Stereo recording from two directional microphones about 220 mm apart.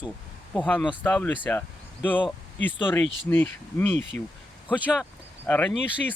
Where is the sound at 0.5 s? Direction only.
5° left (ahead or behind).